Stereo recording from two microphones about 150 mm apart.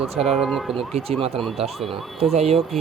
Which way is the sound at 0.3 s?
Centre (ahead or behind).